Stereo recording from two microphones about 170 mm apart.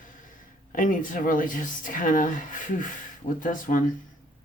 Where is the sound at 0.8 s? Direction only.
50° left (ahead or behind).